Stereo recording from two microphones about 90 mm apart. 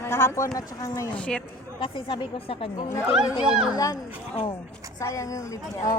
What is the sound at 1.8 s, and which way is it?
Speech, 70° left (ahead or behind).